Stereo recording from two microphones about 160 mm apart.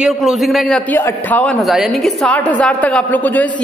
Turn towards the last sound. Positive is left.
turn(degrees=10)  # may be behind; listen again after turning